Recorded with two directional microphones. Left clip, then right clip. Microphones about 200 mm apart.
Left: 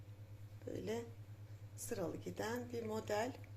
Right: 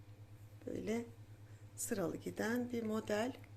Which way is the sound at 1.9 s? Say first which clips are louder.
Right 3 dB; 35° right (ahead or behind).